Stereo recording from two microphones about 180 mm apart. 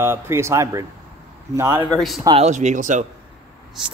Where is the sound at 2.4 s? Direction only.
40° right (ahead or behind).